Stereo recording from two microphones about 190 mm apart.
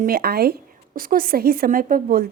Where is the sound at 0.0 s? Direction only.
55° right (ahead or behind).